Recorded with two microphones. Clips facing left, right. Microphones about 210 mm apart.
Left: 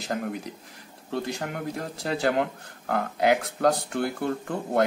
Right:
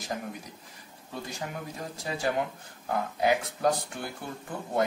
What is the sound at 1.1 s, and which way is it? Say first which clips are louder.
Speech: left 7 dB; 70° left (ahead or behind).